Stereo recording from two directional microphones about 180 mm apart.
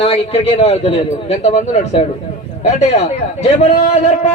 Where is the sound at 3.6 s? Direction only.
35° left (ahead or behind).